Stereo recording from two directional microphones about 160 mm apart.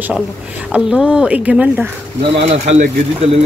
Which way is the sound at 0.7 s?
5° right (ahead or behind).